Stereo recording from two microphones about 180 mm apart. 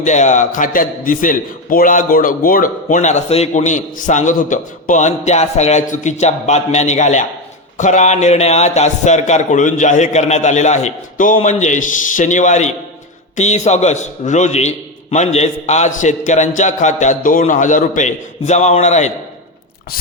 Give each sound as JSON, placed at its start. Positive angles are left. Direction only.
{"t": 0.0, "sound": "a man's voice", "side_deg": 40}